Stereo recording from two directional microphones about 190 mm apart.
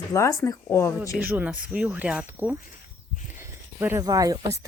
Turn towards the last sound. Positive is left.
turn(degrees=-15)  # may be behind; listen again after turning